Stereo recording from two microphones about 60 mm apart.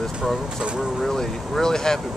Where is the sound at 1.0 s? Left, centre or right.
Centre.